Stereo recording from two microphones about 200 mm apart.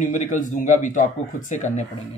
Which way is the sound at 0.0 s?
40° left (ahead or behind).